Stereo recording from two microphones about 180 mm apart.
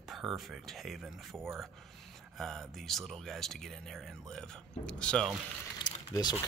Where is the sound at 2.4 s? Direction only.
Centre (ahead or behind).